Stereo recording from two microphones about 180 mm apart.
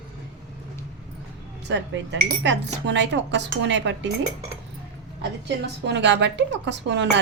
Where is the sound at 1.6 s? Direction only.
80° right.